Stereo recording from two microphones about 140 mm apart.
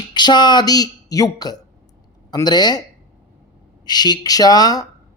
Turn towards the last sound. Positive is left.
turn(degrees=25)  # may be behind; listen again after turning